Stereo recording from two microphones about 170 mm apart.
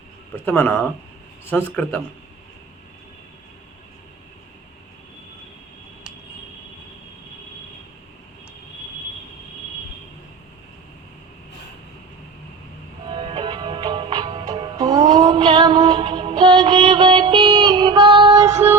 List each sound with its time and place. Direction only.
0.4 s a man's voice: 10° left (ahead or behind)
13.1 s music: 30° right (ahead or behind)
15.1 s a sound: 20° right (ahead or behind)
15.5 s music: 20° right (ahead or behind)
18.4 s music: 35° right (ahead or behind)